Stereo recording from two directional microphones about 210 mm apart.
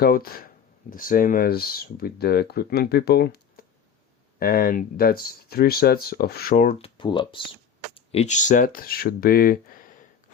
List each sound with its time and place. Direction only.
0.0 s speech: 45° left (ahead or behind)